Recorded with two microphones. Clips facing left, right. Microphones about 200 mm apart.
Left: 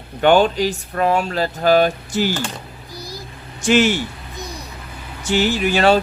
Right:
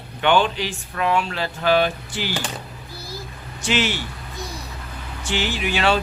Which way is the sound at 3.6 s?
45° left (ahead or behind).